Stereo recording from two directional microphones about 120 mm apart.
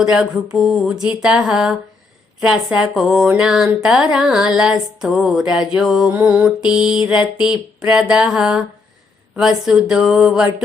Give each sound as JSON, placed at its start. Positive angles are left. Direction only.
{"t": 0.0, "sound": "mantra", "side_deg": -5}